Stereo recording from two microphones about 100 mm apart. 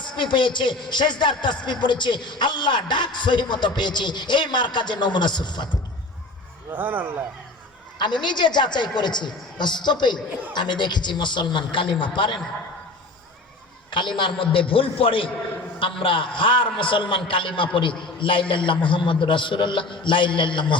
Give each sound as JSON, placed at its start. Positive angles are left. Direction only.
{"t": 0.0, "sound": "a man's voice", "side_deg": 50}
{"t": 6.7, "sound": "speech", "side_deg": -20}
{"t": 7.9, "sound": "a man's voice", "side_deg": 50}
{"t": 13.9, "sound": "a man's voice", "side_deg": 50}